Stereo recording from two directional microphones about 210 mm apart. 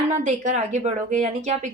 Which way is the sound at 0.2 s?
35° right (ahead or behind).